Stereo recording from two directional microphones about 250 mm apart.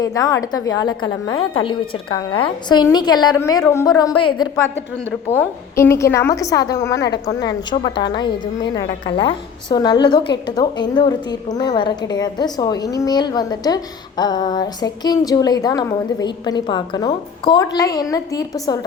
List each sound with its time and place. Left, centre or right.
0.0 s a woman's voice: centre
4.1 s a woman's voice: left
5.3 s a woman's voice: centre